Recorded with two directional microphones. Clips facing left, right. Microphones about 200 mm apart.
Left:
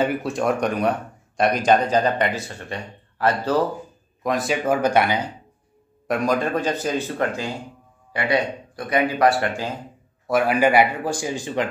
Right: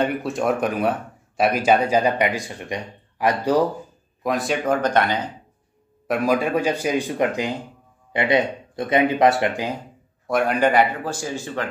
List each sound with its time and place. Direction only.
0.0 s speech: centre (ahead or behind)
4.2 s a man's voice: centre (ahead or behind)
6.0 s speech: 5° right (ahead or behind)
10.2 s a man's voice: 5° left (ahead or behind)